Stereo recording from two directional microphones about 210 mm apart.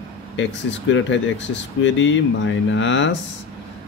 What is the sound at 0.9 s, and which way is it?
Speech, 60° left (ahead or behind).